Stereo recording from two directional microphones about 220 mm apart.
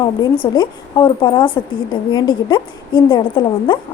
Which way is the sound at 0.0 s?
20° left (ahead or behind).